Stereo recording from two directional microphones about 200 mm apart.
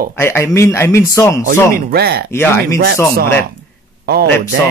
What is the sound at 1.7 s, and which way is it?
Speech, 50° right (ahead or behind).